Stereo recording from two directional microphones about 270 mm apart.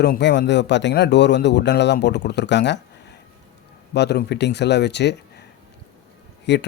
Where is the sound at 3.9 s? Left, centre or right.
Left.